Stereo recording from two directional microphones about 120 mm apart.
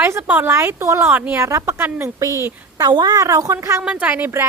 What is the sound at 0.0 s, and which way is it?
Speech, 20° right (ahead or behind).